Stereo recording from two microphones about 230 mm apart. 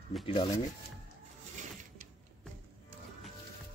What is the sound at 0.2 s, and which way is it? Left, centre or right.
Speech, left.